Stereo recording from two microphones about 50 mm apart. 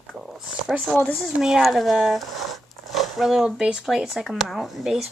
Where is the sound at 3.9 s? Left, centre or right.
Centre.